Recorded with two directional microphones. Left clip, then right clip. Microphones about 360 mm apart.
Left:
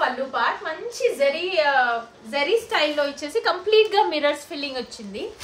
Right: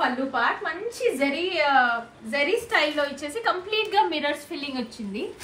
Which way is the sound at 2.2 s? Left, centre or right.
Centre.